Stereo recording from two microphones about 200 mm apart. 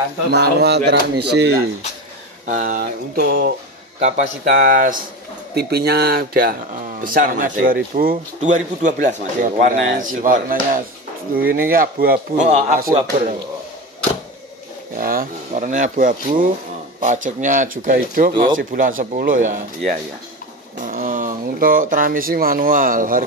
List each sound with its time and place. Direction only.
0.3 s speech: 55° right (ahead or behind)
2.4 s speech: 40° right (ahead or behind)
15.0 s speech: 45° right (ahead or behind)
19.8 s speech: centre (ahead or behind)
20.7 s speech: 40° right (ahead or behind)